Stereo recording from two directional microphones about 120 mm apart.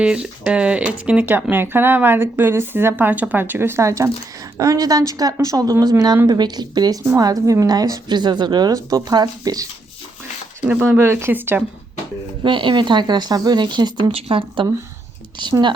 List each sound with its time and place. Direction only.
0.0 s a woman's voice: 10° right (ahead or behind); by 9.6 s 30° right (ahead or behind)
10.7 s speech: 20° right (ahead or behind)
12.4 s a woman's voice: 45° right (ahead or behind)
14.1 s a woman's voice: 50° right (ahead or behind)